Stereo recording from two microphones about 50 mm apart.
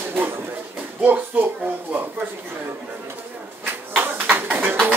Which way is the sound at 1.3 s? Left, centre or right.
Right.